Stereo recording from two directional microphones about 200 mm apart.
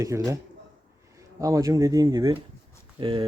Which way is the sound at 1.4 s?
15° right (ahead or behind).